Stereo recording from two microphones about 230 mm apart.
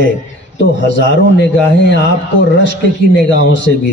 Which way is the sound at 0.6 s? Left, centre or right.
Left.